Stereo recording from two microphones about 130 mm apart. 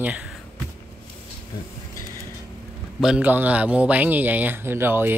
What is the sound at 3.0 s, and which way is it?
A man's voice, 10° right (ahead or behind).